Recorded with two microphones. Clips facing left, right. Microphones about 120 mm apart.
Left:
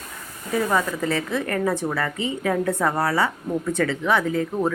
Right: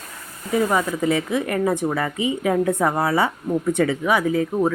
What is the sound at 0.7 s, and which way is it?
Speech, 15° right (ahead or behind).